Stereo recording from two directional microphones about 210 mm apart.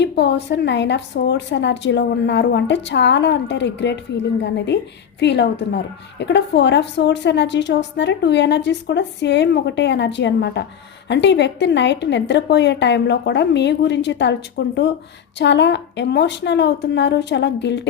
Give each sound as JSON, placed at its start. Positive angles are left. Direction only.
{"t": 0.0, "sound": "a woman's voice", "side_deg": 55}